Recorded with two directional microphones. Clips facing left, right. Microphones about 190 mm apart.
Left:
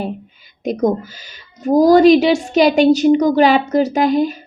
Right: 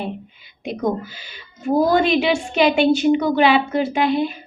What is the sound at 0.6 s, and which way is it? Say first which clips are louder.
Speech: left 5 dB; 45° left (ahead or behind).